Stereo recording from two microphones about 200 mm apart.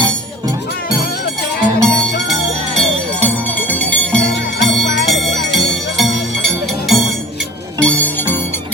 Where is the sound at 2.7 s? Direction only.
5° left (ahead or behind).